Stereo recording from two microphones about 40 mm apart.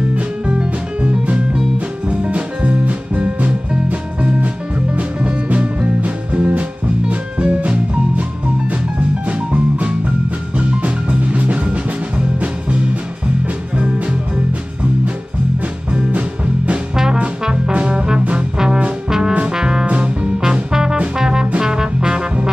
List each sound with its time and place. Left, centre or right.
0.1 s music: right
4.9 s music: right
9.5 s music: right
15.9 s music: right
16.9 s music: centre
17.7 s brass instrument: right
19.0 s music: centre